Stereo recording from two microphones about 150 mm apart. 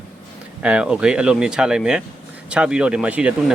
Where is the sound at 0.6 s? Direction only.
10° right (ahead or behind).